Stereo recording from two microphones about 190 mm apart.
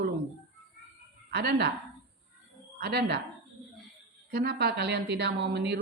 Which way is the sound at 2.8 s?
60° right (ahead or behind).